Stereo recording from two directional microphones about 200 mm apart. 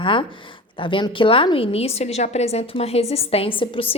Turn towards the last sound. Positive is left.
turn(degrees=25)  # may be behind; listen again after turning